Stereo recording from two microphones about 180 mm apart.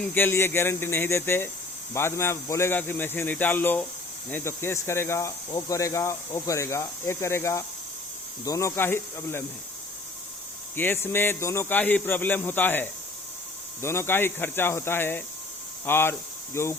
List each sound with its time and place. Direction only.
0.0 s speech: 10° left (ahead or behind)
10.8 s speech: 10° left (ahead or behind)